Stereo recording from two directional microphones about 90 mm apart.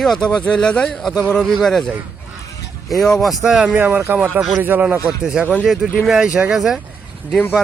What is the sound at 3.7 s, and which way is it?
A man's voice, 25° right (ahead or behind).